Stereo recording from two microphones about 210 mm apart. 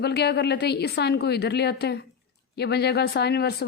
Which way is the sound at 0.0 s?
50° left (ahead or behind).